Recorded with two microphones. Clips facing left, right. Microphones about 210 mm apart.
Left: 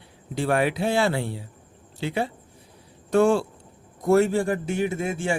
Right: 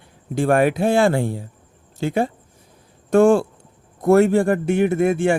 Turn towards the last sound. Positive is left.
turn(degrees=-60)  # may be behind; listen again after turning